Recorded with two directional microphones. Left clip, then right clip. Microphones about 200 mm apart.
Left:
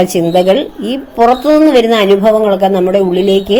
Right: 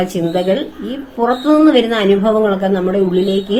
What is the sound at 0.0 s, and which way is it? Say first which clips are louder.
A woman's voice: left 7 dB; 30° left (ahead or behind).